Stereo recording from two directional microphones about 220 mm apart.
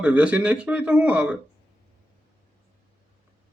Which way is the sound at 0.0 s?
5° right (ahead or behind).